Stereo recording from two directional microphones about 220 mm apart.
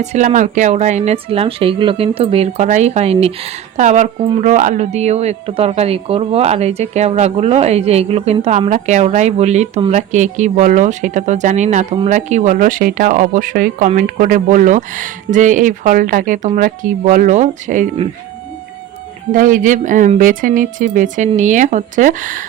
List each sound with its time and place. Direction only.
0.0 s speech: 30° right (ahead or behind)
19.3 s speech: 35° right (ahead or behind)